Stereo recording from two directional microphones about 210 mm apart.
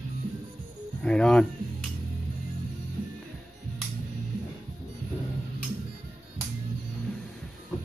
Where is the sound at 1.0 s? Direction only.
5° left (ahead or behind).